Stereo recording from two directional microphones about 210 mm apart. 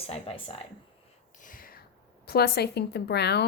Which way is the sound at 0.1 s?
25° left (ahead or behind).